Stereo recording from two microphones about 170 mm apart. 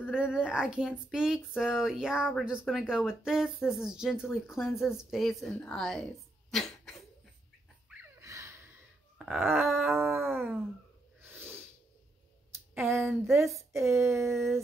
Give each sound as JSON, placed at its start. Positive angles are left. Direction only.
{"t": 0.1, "sound": "speech", "side_deg": -5}
{"t": 6.5, "sound": "cough", "side_deg": 0}
{"t": 8.2, "sound": "gasp", "side_deg": -20}
{"t": 9.2, "sound": "groan", "side_deg": -10}
{"t": 10.0, "sound": "speech", "side_deg": -15}
{"t": 11.1, "sound": "snort", "side_deg": -10}
{"t": 12.7, "sound": "speech", "side_deg": -15}